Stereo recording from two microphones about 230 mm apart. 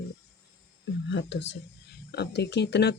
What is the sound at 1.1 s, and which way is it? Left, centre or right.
Speech, left.